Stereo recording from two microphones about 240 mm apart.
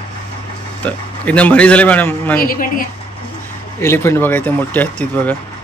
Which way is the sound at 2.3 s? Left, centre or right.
Left.